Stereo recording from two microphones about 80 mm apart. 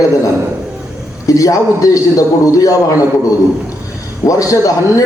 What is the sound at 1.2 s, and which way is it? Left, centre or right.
A man's voice, left.